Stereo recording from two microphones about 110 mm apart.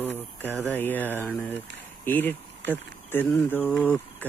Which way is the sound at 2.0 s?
15° left (ahead or behind).